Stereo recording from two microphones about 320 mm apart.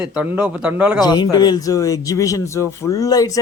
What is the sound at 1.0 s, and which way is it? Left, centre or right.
Speech, centre.